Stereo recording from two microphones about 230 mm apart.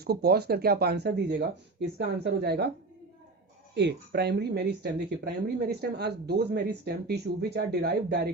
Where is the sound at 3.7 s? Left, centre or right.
Right.